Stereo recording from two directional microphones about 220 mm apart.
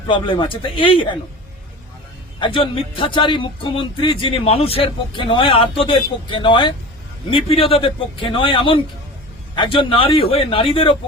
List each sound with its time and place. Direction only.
0.1 s speech: 20° left (ahead or behind)
2.4 s speech: 25° left (ahead or behind)